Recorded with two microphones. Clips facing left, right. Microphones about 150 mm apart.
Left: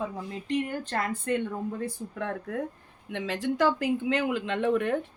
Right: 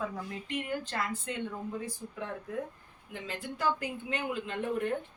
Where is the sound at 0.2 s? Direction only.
25° left (ahead or behind).